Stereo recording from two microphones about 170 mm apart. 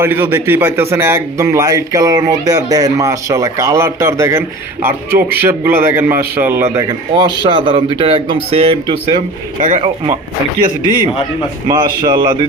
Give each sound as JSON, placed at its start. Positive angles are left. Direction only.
{"t": 0.0, "sound": "a man's voice", "side_deg": -10}
{"t": 6.7, "sound": "a man's voice", "side_deg": -25}
{"t": 9.1, "sound": "speech", "side_deg": -50}
{"t": 9.8, "sound": "speech", "side_deg": -35}
{"t": 11.7, "sound": "a man's voice", "side_deg": -25}